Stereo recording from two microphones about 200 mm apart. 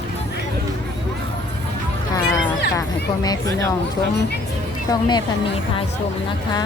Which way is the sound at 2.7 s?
20° left (ahead or behind).